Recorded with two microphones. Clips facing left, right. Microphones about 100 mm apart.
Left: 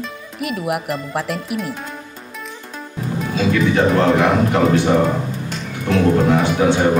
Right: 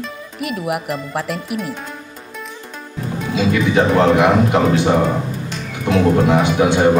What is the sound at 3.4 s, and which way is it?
A man's voice, 15° right (ahead or behind).